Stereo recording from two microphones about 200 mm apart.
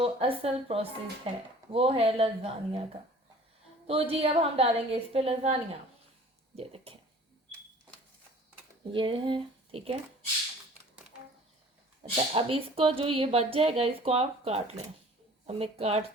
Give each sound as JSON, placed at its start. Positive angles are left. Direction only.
{"t": 0.0, "sound": "speech", "side_deg": -30}
{"t": 3.8, "sound": "speech", "side_deg": -30}
{"t": 6.6, "sound": "speech", "side_deg": -30}
{"t": 8.9, "sound": "speech", "side_deg": -25}
{"t": 12.1, "sound": "speech", "side_deg": -25}